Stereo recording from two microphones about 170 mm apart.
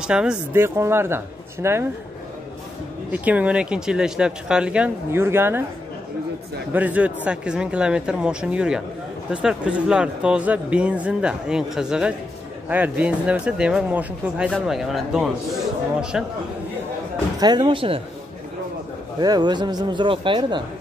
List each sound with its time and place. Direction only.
0.0 s speech: 5° right (ahead or behind)
3.1 s speech: 10° right (ahead or behind)
6.7 s speech: 10° right (ahead or behind)
17.4 s speech: 25° right (ahead or behind)
19.1 s speech: 25° right (ahead or behind)